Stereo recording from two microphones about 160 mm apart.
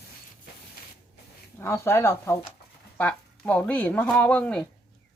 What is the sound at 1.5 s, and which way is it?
Speech, 15° left (ahead or behind).